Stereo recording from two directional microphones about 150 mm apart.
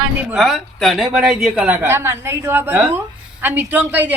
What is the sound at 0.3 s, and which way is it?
A woman's voice, centre (ahead or behind).